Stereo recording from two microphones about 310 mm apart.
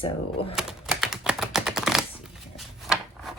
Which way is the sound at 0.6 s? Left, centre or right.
Centre.